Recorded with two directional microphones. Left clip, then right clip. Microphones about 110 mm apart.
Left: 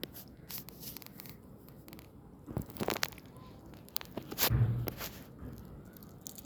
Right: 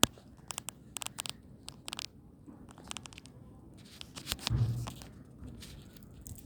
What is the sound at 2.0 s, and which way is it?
Biting, 5° left (ahead or behind).